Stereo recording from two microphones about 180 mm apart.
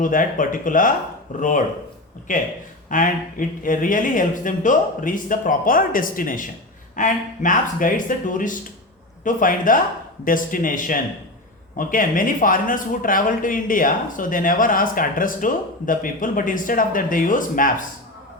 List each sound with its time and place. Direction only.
0.0 s speech: 45° left (ahead or behind)